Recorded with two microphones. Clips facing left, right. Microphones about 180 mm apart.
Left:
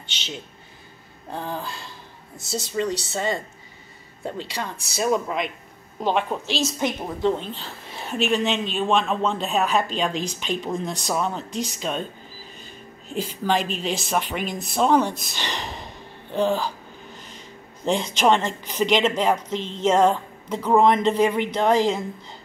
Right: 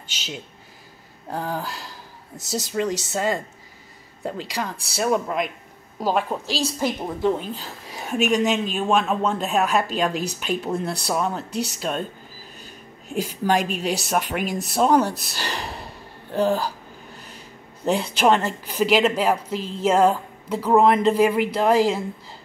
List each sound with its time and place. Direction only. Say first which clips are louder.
1.3 s a woman's voice: right 3 dB; 5° right (ahead or behind)
2.7 s a woman's voice: right 1 dB; 5° right (ahead or behind)
6.4 s a woman's voice: even; 35° right (ahead or behind)
6.8 s a woman's voice: right 3 dB; 10° right (ahead or behind)
13.1 s a woman's voice: right 2 dB; 10° right (ahead or behind)
15.3 s a sound: right 1 dB; 5° right (ahead or behind)
17.8 s a woman's voice: right 1 dB; 5° right (ahead or behind)